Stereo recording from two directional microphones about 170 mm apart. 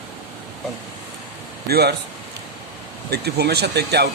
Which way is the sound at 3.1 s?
70° right (ahead or behind).